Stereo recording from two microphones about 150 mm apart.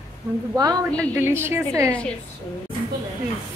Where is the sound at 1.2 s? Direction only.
15° right (ahead or behind).